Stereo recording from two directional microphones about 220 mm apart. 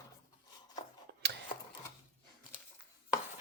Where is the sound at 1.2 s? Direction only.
50° right (ahead or behind).